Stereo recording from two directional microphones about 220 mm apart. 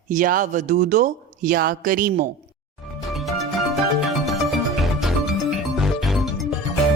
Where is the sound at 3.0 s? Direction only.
Centre (ahead or behind).